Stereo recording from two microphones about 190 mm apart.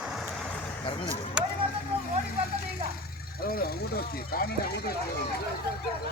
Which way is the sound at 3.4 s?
50° left (ahead or behind).